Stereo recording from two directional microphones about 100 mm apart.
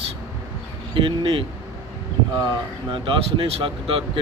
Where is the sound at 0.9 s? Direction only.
55° right (ahead or behind).